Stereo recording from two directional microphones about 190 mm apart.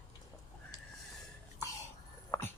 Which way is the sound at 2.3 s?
20° left (ahead or behind).